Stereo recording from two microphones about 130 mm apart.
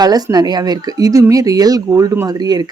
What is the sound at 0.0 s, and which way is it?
Speech, 30° right (ahead or behind).